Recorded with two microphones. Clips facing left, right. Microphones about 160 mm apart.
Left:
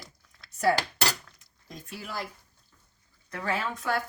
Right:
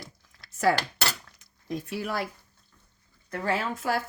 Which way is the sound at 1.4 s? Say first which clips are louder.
Right 12 dB; 70° right (ahead or behind).